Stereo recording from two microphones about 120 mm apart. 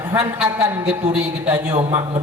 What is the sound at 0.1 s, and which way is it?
A man's voice, 10° right (ahead or behind).